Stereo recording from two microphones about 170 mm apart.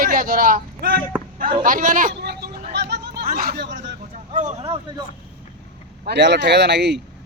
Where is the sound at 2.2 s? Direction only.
70° right (ahead or behind).